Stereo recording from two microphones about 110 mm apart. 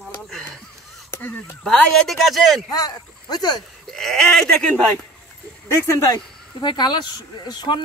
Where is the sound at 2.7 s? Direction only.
35° left (ahead or behind).